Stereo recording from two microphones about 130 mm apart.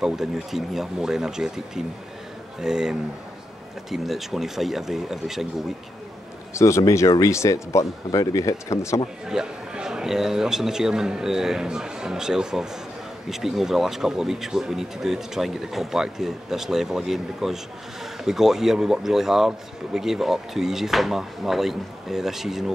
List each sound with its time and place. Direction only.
0.0 s speech: 5° right (ahead or behind)
6.5 s speech: 20° left (ahead or behind)
9.2 s speech: 5° right (ahead or behind)